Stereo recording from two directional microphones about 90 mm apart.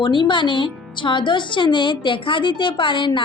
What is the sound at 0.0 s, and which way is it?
Music, 60° left (ahead or behind).